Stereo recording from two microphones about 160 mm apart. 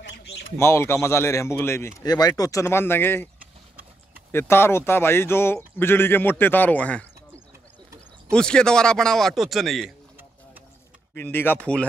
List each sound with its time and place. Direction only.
0.1 s bird: 90° left
0.6 s speech: 15° left (ahead or behind)
4.3 s speech: 15° left (ahead or behind)
8.3 s speech: 5° left (ahead or behind)
11.1 s speech: 10° left (ahead or behind)